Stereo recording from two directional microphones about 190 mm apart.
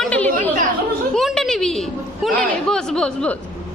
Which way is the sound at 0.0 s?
5° left (ahead or behind).